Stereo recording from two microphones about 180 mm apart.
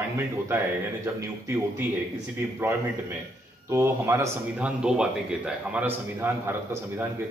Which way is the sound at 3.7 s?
15° right (ahead or behind).